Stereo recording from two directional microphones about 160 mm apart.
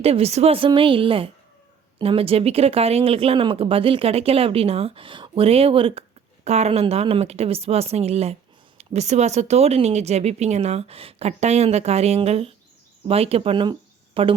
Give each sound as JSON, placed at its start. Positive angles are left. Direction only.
{"t": 0.0, "sound": "speech", "side_deg": -40}